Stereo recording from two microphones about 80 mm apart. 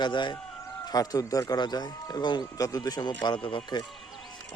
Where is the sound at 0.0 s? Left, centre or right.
Left.